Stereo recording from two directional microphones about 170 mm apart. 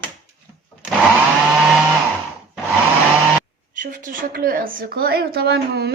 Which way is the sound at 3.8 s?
50° right (ahead or behind).